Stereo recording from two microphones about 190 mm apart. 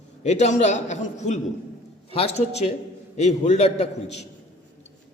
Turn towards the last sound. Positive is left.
turn(degrees=35)  # may be behind; listen again after turning